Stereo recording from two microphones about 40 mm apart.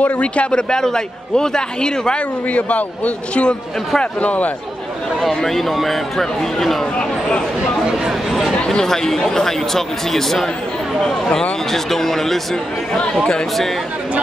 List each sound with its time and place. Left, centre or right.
0.0 s a man's voice: left
0.5 s a man's voice: centre
2.5 s a man's voice: left
5.2 s speech: centre
7.0 s a man's voice: left
8.3 s a sound: centre
8.6 s speech: centre
11.7 s speech: centre